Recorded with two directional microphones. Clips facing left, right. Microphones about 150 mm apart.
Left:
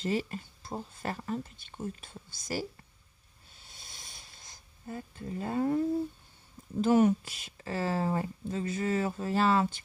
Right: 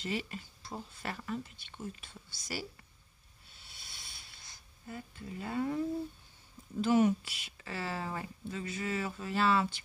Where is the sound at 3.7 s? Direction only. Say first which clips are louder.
Left 3 dB; 45° left (ahead or behind).